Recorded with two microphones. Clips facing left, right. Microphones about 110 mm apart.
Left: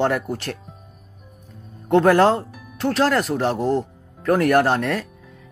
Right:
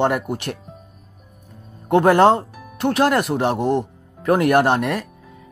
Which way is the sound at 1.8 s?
15° right (ahead or behind).